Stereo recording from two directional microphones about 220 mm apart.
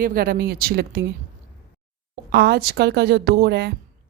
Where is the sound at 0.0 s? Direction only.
40° right (ahead or behind).